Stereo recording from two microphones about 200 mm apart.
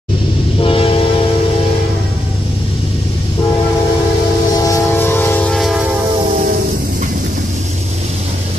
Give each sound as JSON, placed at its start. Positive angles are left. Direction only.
{"t": 0.6, "sound": "train", "side_deg": 25}
{"t": 4.6, "sound": "train", "side_deg": 15}